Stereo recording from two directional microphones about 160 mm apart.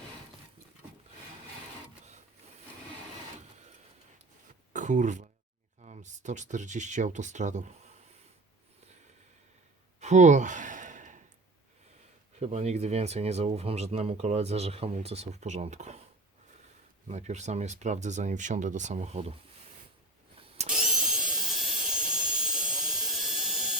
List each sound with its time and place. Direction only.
4.7 s a sound: 50° right (ahead or behind)
5.8 s speech: 50° right (ahead or behind)
10.0 s gasp: 45° right (ahead or behind)
12.4 s speech: 45° right (ahead or behind)
17.1 s speech: 45° right (ahead or behind)
20.7 s a sound: 5° right (ahead or behind)